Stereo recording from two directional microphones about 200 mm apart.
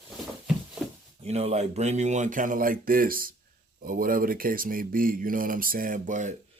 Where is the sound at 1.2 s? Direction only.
35° right (ahead or behind).